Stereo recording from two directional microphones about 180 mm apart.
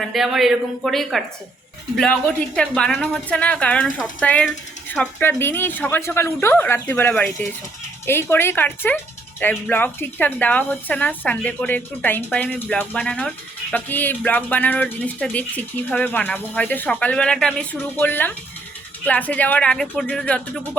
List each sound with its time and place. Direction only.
0.0 s a woman's voice: centre (ahead or behind)